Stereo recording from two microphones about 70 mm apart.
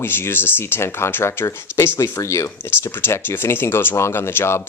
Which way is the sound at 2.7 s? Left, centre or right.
Left.